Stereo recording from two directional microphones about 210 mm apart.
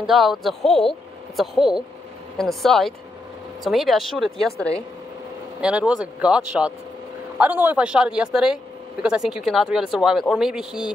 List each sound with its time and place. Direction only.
0.0 s speech: centre (ahead or behind)